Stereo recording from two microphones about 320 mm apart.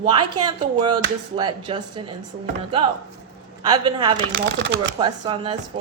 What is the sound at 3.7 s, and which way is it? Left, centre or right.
Speech, centre.